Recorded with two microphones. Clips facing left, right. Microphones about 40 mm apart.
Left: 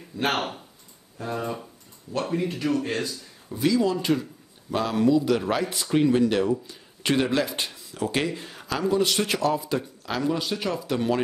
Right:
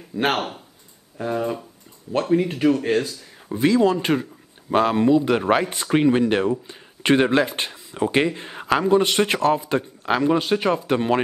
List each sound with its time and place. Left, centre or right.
0.1 s speech: right
1.3 s speech: centre
2.4 s speech: right